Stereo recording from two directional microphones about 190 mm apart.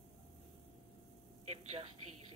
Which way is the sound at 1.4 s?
30° right (ahead or behind).